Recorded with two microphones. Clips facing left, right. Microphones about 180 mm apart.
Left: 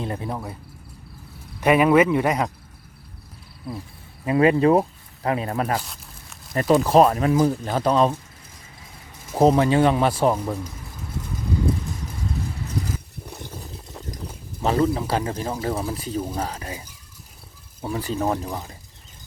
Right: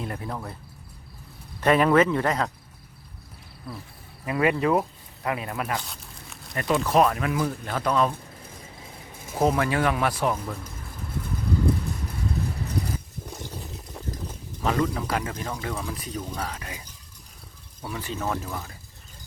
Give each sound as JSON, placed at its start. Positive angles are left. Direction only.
{"t": 0.0, "sound": "speech", "side_deg": 25}
{"t": 1.6, "sound": "speech", "side_deg": 10}
{"t": 4.3, "sound": "speech", "side_deg": 30}
{"t": 5.8, "sound": "crumpling", "side_deg": 0}
{"t": 6.6, "sound": "speech", "side_deg": 35}
{"t": 9.4, "sound": "speech", "side_deg": 25}
{"t": 14.6, "sound": "speech", "side_deg": 30}
{"t": 17.8, "sound": "speech", "side_deg": 35}
{"t": 18.4, "sound": "speech", "side_deg": 20}